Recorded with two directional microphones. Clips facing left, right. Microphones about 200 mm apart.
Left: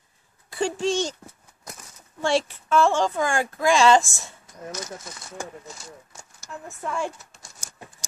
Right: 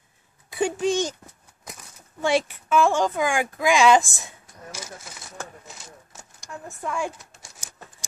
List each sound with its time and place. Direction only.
0.5 s a child's voice: 20° right (ahead or behind)
2.2 s speech: 15° right (ahead or behind)
6.4 s speech: centre (ahead or behind)